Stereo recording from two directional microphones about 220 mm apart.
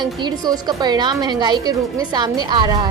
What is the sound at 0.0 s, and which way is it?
A woman's voice, 20° right (ahead or behind).